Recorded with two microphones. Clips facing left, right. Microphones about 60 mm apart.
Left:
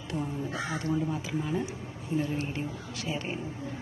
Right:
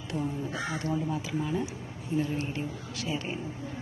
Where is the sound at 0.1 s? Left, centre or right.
Left.